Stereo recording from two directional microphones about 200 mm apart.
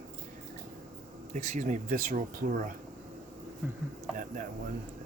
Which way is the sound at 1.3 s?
40° right (ahead or behind).